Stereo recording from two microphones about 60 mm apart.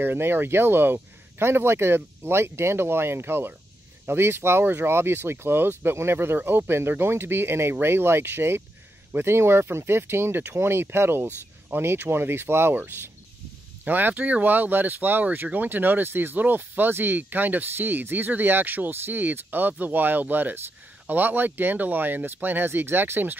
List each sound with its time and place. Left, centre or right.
0.0 s speech: right